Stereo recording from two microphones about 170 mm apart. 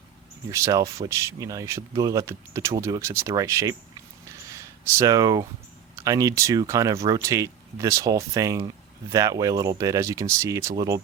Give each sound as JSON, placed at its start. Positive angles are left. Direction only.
{"t": 0.5, "sound": "speech", "side_deg": -20}
{"t": 4.3, "sound": "a sound", "side_deg": -15}
{"t": 6.0, "sound": "speech", "side_deg": -20}